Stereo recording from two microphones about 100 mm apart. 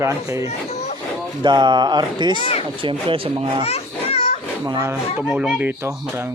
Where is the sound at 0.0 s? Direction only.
30° right (ahead or behind).